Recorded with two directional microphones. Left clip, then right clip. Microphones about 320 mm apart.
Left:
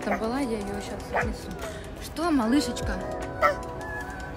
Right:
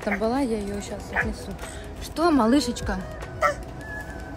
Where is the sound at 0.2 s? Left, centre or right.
Centre.